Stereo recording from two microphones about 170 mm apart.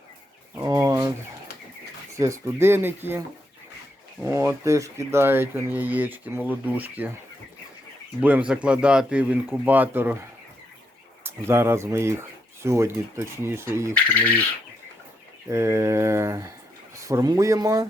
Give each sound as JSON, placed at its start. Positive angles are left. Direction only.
{"t": 0.5, "sound": "bird", "side_deg": -20}
{"t": 2.1, "sound": "speech", "side_deg": -20}
{"t": 8.2, "sound": "speech", "side_deg": -10}
{"t": 11.2, "sound": "speech", "side_deg": -15}
{"t": 13.9, "sound": "a sound", "side_deg": 10}
{"t": 15.4, "sound": "speech", "side_deg": -15}